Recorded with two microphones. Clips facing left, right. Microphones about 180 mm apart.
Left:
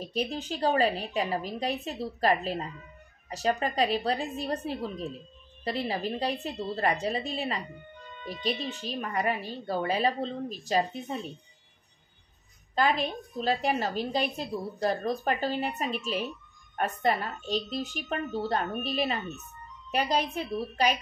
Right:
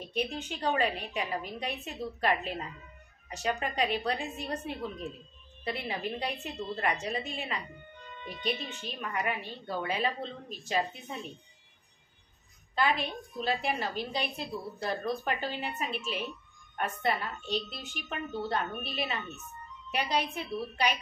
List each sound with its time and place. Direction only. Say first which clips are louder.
0.0 s a woman's voice: left 2 dB; 35° left (ahead or behind)
12.7 s a woman's voice: left 3 dB; 40° left (ahead or behind)